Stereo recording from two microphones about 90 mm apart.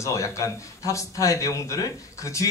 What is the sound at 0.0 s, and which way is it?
A man's voice, 35° left (ahead or behind).